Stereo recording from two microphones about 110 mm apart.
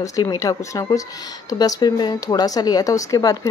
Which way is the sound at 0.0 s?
35° left (ahead or behind).